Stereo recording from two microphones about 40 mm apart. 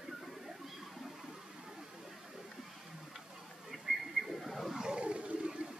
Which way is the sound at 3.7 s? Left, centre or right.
Centre.